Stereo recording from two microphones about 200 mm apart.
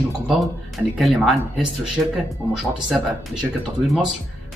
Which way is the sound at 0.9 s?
Centre (ahead or behind).